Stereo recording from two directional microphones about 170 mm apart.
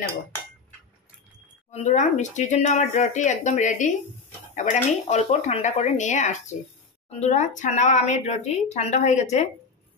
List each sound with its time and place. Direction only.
1.7 s speech: 40° left (ahead or behind)